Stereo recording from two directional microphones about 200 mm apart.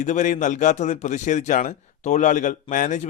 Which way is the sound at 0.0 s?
40° left (ahead or behind).